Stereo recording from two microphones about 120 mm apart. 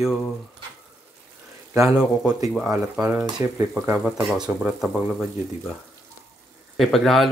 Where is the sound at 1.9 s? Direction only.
5° right (ahead or behind).